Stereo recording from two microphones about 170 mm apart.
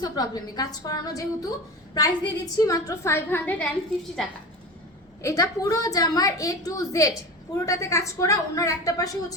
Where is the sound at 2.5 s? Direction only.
20° left (ahead or behind); by 4.3 s centre (ahead or behind).